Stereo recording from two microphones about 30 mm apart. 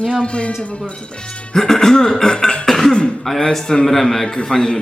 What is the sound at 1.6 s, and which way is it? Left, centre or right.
Beatboxing, centre.